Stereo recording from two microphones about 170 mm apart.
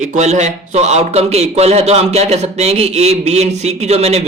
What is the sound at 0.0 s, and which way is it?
A man's voice, 45° right (ahead or behind).